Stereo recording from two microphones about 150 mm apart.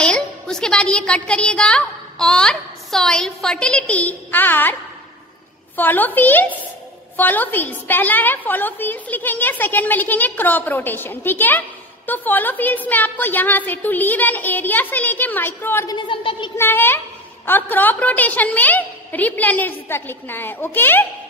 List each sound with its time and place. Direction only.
0.0 s a woman's voice: 5° left (ahead or behind)
5.8 s a woman's voice: 10° left (ahead or behind)
16.0 s a woman's voice: 35° left (ahead or behind)
16.5 s a woman's voice: 15° left (ahead or behind)